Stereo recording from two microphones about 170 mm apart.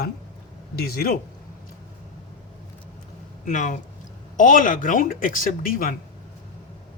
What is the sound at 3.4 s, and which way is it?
Speech, 50° left (ahead or behind).